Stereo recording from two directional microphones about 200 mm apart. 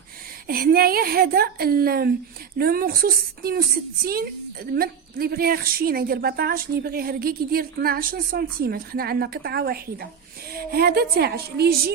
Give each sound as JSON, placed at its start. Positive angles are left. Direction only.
{"t": 0.4, "sound": "a woman's voice", "side_deg": -50}